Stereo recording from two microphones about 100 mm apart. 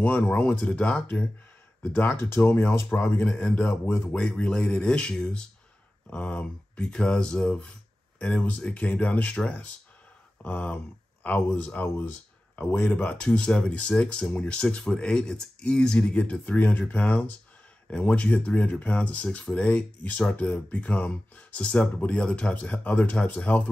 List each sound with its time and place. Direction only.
0.0 s speech: 15° left (ahead or behind)
4.1 s speech: 10° left (ahead or behind)